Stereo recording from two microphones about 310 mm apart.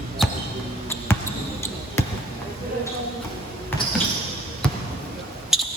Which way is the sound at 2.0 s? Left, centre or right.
Centre.